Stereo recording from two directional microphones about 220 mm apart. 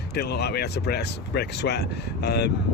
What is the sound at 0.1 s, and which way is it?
Speech, 50° left (ahead or behind).